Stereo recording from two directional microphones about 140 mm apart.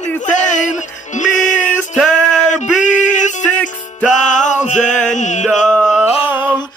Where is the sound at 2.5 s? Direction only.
60° left (ahead or behind).